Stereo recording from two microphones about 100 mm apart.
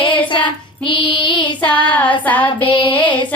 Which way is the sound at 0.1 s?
55° left (ahead or behind).